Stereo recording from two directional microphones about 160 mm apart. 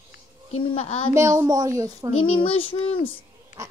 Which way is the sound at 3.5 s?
50° left (ahead or behind).